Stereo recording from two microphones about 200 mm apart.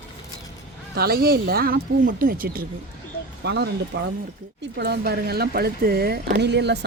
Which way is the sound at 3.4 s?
60° right (ahead or behind).